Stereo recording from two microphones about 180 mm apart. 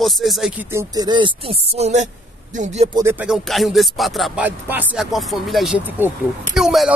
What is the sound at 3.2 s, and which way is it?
Speech, centre (ahead or behind).